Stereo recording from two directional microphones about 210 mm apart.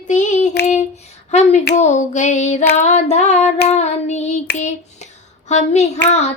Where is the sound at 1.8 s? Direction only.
35° left (ahead or behind).